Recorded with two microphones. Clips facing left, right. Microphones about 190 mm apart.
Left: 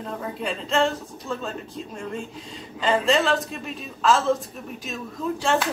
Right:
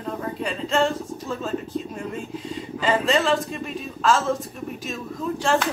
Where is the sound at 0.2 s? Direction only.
Centre (ahead or behind).